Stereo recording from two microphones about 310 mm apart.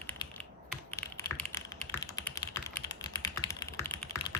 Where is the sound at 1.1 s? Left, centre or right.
Centre.